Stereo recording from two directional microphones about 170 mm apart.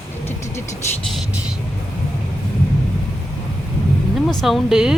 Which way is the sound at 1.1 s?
5° right (ahead or behind).